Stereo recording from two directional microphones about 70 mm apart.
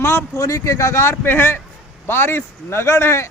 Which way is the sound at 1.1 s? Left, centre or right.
Left.